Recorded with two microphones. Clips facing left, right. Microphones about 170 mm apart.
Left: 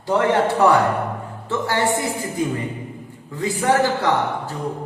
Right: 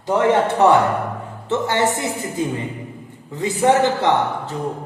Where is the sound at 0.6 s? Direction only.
20° right (ahead or behind).